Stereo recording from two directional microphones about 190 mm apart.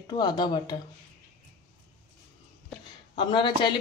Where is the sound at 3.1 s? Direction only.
25° left (ahead or behind).